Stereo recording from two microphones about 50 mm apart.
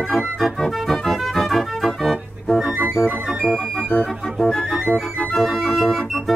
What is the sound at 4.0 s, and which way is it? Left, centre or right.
Organ, centre.